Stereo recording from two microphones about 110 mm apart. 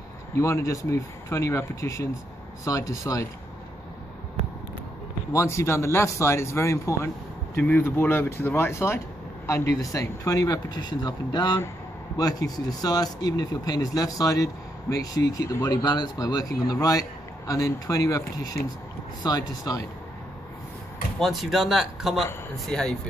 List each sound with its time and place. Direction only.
0.4 s speech: 25° left (ahead or behind)
5.3 s speech: 25° left (ahead or behind)
21.2 s speech: centre (ahead or behind)